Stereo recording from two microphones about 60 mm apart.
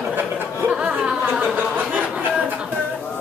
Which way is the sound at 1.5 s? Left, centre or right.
Right.